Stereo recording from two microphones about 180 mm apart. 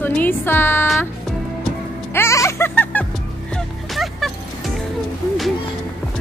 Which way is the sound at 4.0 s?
Centre (ahead or behind).